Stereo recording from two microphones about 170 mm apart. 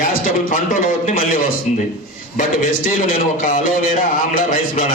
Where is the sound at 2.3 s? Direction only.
50° left (ahead or behind).